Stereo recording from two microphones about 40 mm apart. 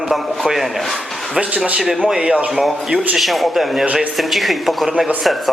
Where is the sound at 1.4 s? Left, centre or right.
Right.